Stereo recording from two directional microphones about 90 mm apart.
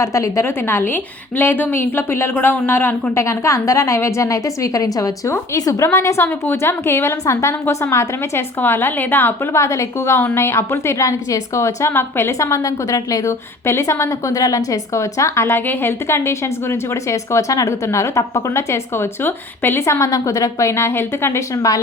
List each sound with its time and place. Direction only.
0.0 s a woman's voice: 35° left (ahead or behind)